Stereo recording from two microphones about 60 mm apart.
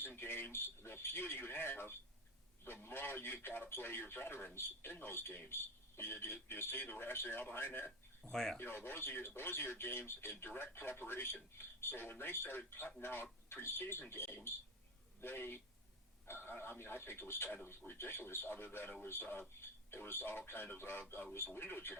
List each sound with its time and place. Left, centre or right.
0.2 s speech: left
8.2 s speech: centre
8.5 s speech: left